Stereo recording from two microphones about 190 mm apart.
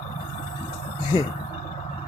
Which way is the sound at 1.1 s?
25° left (ahead or behind).